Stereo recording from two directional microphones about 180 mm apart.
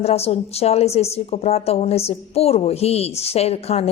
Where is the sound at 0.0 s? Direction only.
35° left (ahead or behind).